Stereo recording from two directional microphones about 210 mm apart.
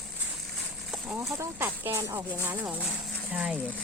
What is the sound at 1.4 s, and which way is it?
Speech, 10° right (ahead or behind).